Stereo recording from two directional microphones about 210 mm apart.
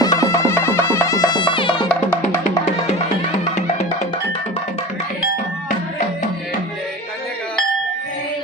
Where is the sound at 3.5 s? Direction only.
35° left (ahead or behind).